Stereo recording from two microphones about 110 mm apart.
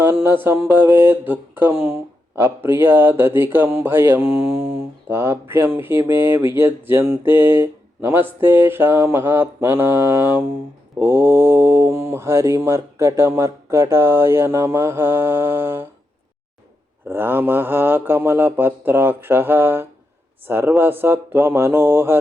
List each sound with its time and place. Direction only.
0.0 s speech: 20° right (ahead or behind)
17.1 s speech: 20° right (ahead or behind)